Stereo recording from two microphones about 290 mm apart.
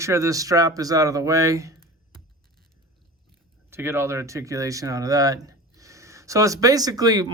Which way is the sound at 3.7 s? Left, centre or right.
Centre.